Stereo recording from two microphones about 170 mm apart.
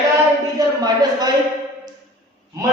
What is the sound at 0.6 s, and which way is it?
Speech, 20° right (ahead or behind).